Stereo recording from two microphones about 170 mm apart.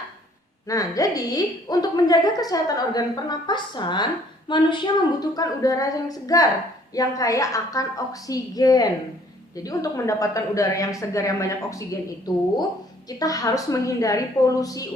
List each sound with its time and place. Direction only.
0.7 s a woman's voice: 20° left (ahead or behind)